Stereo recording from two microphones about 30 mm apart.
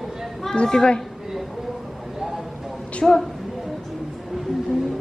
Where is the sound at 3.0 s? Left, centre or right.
Centre.